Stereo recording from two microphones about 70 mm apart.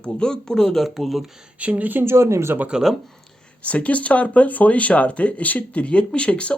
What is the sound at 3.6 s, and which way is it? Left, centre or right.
Speech, centre.